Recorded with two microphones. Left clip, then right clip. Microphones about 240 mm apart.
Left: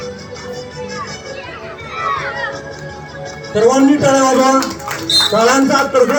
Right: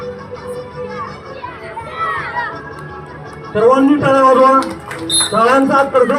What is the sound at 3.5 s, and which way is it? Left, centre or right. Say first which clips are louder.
Speech: even; left.